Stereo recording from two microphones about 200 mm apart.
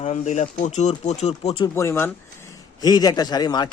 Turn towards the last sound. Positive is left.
turn(degrees=20)  # may be behind; listen again after turning